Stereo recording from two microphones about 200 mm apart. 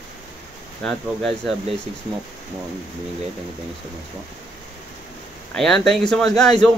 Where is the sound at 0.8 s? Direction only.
Centre (ahead or behind).